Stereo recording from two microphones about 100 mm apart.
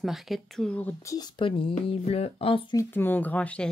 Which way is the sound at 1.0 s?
35° left (ahead or behind).